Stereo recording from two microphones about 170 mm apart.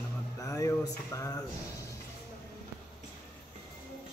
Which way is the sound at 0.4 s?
20° left (ahead or behind).